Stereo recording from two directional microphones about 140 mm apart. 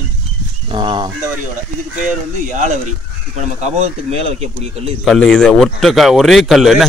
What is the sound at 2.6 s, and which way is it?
Speech, 60° right (ahead or behind).